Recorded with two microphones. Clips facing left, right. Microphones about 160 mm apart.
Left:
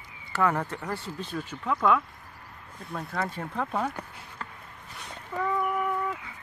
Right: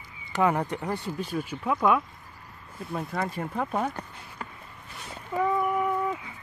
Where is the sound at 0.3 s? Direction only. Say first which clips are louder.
Right 2 dB; 15° right (ahead or behind).